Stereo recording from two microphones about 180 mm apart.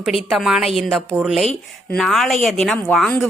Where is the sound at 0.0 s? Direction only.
5° right (ahead or behind).